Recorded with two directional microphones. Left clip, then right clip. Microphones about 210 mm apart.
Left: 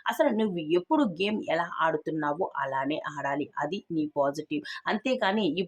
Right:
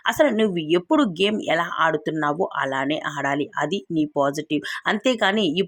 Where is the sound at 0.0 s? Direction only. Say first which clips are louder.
Right 7 dB; 25° right (ahead or behind).